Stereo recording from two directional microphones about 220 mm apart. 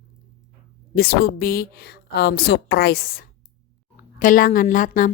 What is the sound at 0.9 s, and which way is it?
A woman's voice, 45° left (ahead or behind).